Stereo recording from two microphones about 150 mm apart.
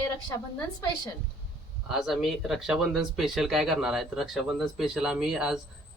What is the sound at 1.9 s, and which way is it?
Speech, centre (ahead or behind).